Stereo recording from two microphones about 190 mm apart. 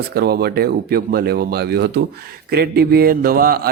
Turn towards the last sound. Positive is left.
turn(degrees=-50)  # may be behind; listen again after turning